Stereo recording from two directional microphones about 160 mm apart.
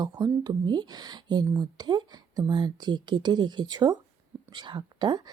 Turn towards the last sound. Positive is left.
turn(degrees=-30)  # may be behind; listen again after turning